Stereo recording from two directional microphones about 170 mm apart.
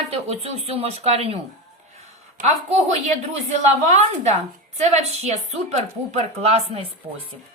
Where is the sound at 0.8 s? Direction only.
35° right (ahead or behind).